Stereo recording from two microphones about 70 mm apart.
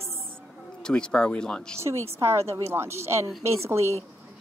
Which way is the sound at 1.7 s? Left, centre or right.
Right.